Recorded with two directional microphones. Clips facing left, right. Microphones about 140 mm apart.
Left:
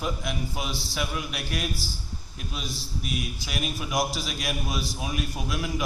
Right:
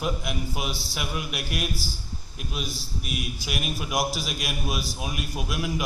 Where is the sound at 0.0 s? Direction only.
10° right (ahead or behind).